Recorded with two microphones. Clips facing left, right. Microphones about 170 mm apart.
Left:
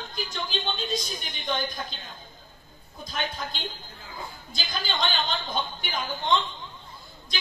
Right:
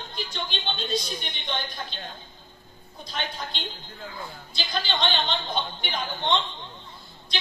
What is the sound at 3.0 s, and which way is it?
Speech, 45° left (ahead or behind).